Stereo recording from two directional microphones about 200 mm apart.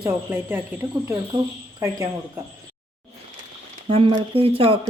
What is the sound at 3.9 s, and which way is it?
Speech, 25° right (ahead or behind).